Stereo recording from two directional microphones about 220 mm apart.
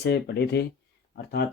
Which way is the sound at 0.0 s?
50° left (ahead or behind).